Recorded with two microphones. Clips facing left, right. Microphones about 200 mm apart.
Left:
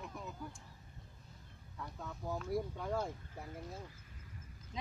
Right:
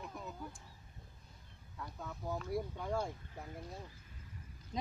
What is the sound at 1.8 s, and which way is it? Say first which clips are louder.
Speech: even; centre (ahead or behind).